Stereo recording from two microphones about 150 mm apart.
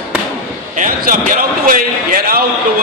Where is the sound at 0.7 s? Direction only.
60° right (ahead or behind).